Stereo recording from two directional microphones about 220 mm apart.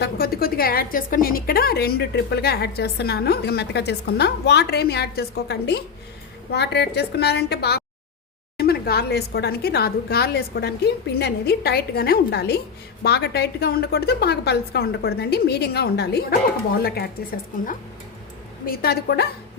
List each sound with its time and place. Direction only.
0.0 s a woman's voice: 45° left (ahead or behind)